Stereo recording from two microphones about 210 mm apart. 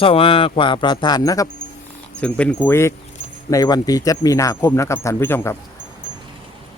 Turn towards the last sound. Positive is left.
turn(degrees=10)  # may be behind; listen again after turning